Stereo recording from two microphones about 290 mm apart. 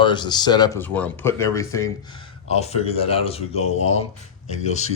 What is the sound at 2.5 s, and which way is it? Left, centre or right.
Speech, left.